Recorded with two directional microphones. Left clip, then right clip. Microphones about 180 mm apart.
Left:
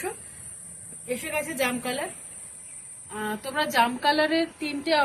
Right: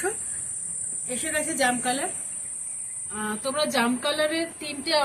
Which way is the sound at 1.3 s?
70° left (ahead or behind).